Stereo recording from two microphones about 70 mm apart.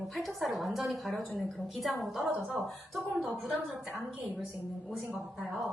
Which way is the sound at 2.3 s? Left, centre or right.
Centre.